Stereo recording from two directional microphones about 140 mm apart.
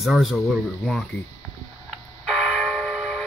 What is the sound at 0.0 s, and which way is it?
Speech, centre (ahead or behind).